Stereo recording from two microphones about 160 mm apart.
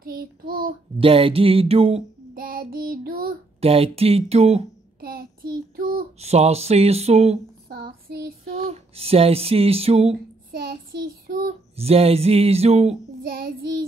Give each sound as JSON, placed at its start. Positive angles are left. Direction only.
{"t": 0.0, "sound": "child singing", "side_deg": -65}
{"t": 0.9, "sound": "speech", "side_deg": -35}
{"t": 2.3, "sound": "child singing", "side_deg": -65}
{"t": 3.6, "sound": "speech", "side_deg": -40}
{"t": 5.0, "sound": "child singing", "side_deg": -65}
{"t": 6.1, "sound": "speech", "side_deg": -40}
{"t": 7.6, "sound": "child singing", "side_deg": -70}
{"t": 8.5, "sound": "speech", "side_deg": -40}
{"t": 10.5, "sound": "child singing", "side_deg": -70}
{"t": 11.7, "sound": "speech", "side_deg": -40}
{"t": 13.2, "sound": "child singing", "side_deg": -70}